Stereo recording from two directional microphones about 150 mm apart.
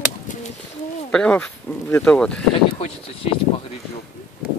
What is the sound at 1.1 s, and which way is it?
Speech, 5° left (ahead or behind).